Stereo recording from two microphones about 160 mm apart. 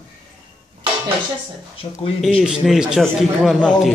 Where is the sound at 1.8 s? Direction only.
35° left (ahead or behind).